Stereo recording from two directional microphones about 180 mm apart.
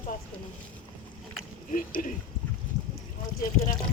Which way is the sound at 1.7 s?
50° left (ahead or behind).